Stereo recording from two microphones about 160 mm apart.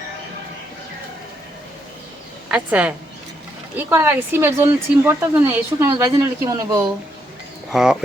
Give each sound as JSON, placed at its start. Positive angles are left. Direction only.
{"t": 2.5, "sound": "speech", "side_deg": -10}
{"t": 5.9, "sound": "a man's voice", "side_deg": -25}
{"t": 7.7, "sound": "speech", "side_deg": 0}